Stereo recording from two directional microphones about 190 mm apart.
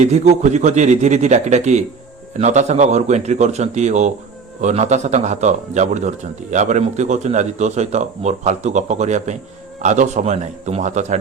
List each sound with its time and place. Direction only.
0.0 s a man's voice: 35° right (ahead or behind)